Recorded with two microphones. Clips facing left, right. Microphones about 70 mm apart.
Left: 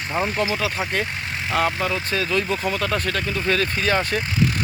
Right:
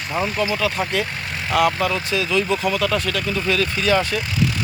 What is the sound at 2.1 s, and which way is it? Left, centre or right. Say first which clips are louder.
Speech: right 2 dB; left.